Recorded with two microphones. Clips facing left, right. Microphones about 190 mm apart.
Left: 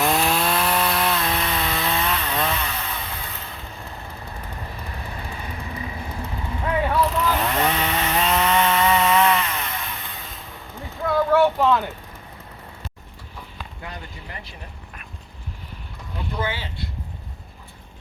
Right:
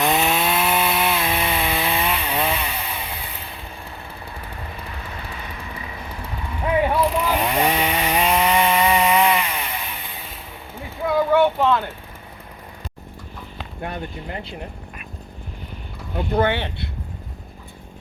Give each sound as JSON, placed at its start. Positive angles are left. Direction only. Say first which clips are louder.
{"t": 0.0, "sound": "chainsaw", "louder": "right 1 dB", "side_deg": 0}
{"t": 6.7, "sound": "chainsaw", "louder": "right 3 dB", "side_deg": -10}
{"t": 10.8, "sound": "a sound", "louder": "right 1 dB", "side_deg": -5}
{"t": 11.6, "sound": "vehicle", "louder": "even", "side_deg": 5}
{"t": 13.8, "sound": "a sound", "louder": "right 9 dB", "side_deg": -60}
{"t": 16.1, "sound": "speech", "louder": "right 8 dB", "side_deg": -65}